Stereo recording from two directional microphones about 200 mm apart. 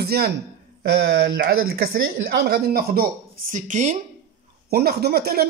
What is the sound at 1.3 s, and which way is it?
Speech, 50° right (ahead or behind).